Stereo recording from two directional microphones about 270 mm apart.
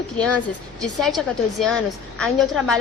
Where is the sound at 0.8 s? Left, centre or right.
Centre.